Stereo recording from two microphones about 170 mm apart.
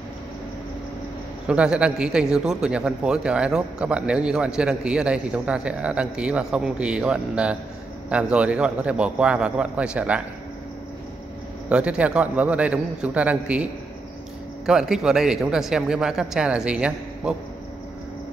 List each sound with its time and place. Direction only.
1.5 s a man's voice: 5° right (ahead or behind)
11.7 s a man's voice: 5° right (ahead or behind)
14.7 s a man's voice: 5° right (ahead or behind)